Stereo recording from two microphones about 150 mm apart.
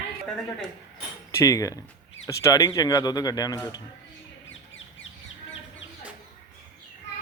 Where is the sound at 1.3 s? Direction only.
20° left (ahead or behind).